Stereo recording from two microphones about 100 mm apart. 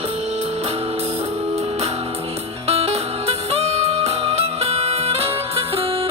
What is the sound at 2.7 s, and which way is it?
Music, 90° right.